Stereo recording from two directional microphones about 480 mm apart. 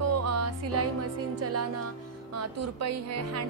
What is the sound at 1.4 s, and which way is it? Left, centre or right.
A woman's voice, right.